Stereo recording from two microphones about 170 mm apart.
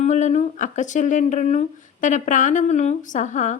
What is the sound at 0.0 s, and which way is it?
Speech, 45° left (ahead or behind).